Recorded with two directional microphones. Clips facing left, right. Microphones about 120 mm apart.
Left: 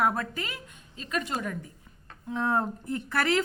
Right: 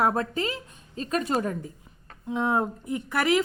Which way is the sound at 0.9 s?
40° right (ahead or behind).